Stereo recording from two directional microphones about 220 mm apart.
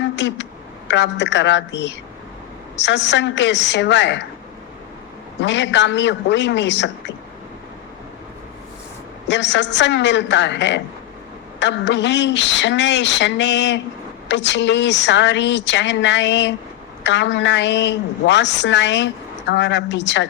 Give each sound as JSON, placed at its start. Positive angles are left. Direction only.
{"t": 0.2, "sound": "a woman's voice", "side_deg": 55}
{"t": 5.4, "sound": "a woman's voice", "side_deg": 55}
{"t": 9.2, "sound": "a woman's voice", "side_deg": 55}